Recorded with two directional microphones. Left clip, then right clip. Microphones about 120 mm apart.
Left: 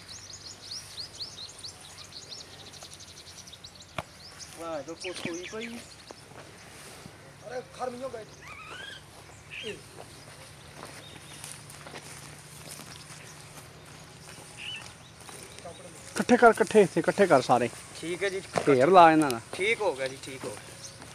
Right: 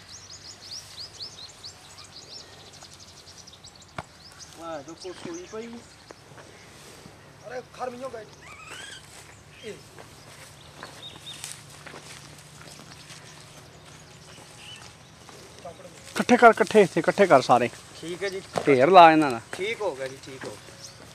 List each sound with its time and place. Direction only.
0.7 s a sound: 10° left (ahead or behind)
3.9 s chop: centre (ahead or behind)
7.4 s speech: 25° right (ahead or behind)
16.3 s speech: 40° right (ahead or behind)
17.9 s speech: 5° left (ahead or behind)
18.7 s speech: 35° right (ahead or behind)
19.6 s speech: 10° left (ahead or behind)